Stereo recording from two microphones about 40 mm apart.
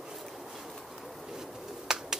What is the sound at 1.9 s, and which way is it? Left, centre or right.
Finger snapping, centre.